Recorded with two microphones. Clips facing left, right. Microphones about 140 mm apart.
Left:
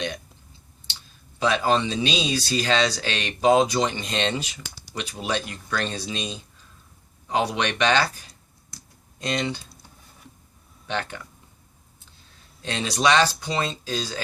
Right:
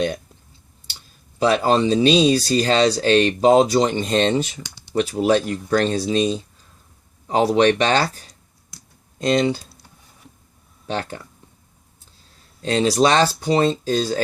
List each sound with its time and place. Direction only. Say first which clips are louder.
1.4 s speech: right 5 dB; 35° right (ahead or behind)
9.1 s speech: right 9 dB; 30° right (ahead or behind)
10.8 s speech: right 3 dB; 35° right (ahead or behind)
12.6 s speech: right 6 dB; 35° right (ahead or behind)